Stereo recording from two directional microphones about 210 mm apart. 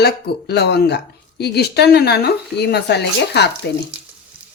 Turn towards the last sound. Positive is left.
turn(degrees=55)  # may be behind; listen again after turning